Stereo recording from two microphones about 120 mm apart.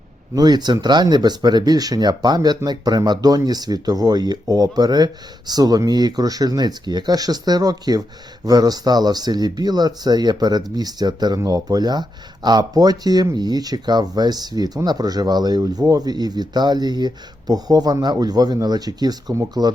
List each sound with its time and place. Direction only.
0.3 s speech: 35° right (ahead or behind)